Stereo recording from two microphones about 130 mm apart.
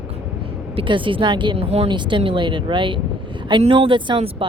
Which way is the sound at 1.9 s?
40° right (ahead or behind).